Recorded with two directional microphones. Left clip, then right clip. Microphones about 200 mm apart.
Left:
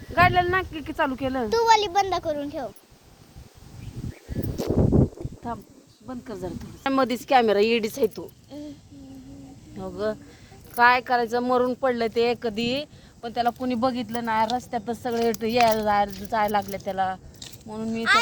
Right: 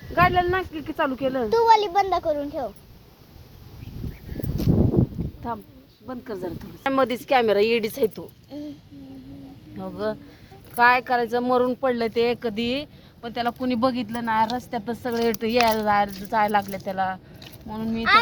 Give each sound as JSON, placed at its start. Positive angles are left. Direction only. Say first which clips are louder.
{"t": 0.1, "sound": "speech", "louder": "even", "side_deg": 35}
{"t": 1.5, "sound": "a child's voice", "louder": "right 2 dB", "side_deg": 10}
{"t": 4.6, "sound": "a sound", "louder": "even", "side_deg": 35}
{"t": 5.5, "sound": "speech", "louder": "right 2 dB", "side_deg": 20}
{"t": 6.8, "sound": "speech", "louder": "right 1 dB", "side_deg": 40}
{"t": 8.4, "sound": "a sound", "louder": "right 2 dB", "side_deg": 0}
{"t": 9.7, "sound": "speech", "louder": "even", "side_deg": 30}